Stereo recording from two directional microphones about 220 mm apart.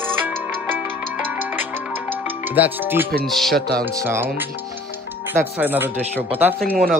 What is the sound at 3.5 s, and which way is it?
Speech, 45° right (ahead or behind).